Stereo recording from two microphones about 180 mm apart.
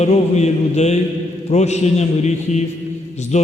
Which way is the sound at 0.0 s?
40° left (ahead or behind).